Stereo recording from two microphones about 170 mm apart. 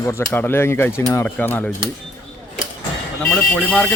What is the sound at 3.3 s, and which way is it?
Speech, 5° left (ahead or behind).